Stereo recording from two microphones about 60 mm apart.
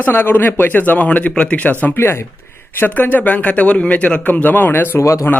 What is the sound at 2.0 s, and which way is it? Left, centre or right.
A man's voice, left.